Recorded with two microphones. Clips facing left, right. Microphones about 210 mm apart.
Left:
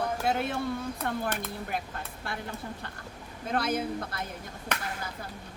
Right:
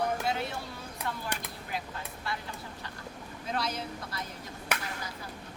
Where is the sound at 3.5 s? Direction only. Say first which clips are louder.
Left 6 dB; 55° left (ahead or behind).